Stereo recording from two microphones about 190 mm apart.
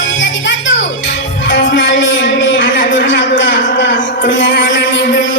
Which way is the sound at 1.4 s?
75° left (ahead or behind).